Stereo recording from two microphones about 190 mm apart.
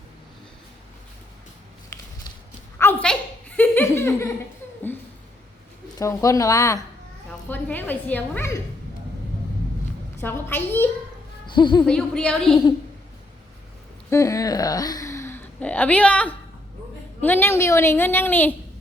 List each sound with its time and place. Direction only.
2.7 s a sound: 10° left (ahead or behind)
3.6 s laughter: 10° left (ahead or behind)
6.0 s a woman's voice: 15° left (ahead or behind)
10.2 s a woman's voice: 10° left (ahead or behind)
11.4 s speech: 25° left (ahead or behind)
11.9 s a woman's voice: 5° left (ahead or behind)
14.1 s a woman's voice: 15° left (ahead or behind)